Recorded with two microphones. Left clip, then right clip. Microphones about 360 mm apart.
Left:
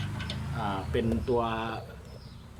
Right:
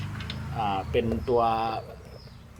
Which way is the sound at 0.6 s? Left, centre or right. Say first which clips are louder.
Right 5 dB; centre.